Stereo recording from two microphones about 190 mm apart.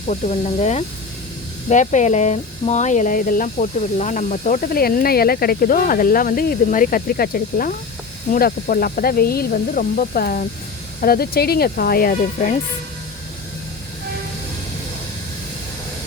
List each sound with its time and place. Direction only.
0.1 s speech: 35° left (ahead or behind)